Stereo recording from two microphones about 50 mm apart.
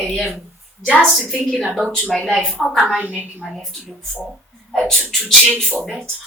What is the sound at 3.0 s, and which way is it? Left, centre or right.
Speech, right.